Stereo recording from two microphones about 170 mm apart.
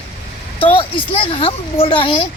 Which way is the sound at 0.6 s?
30° left (ahead or behind).